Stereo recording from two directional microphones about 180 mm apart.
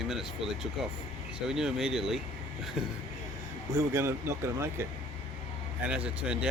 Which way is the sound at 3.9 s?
15° right (ahead or behind).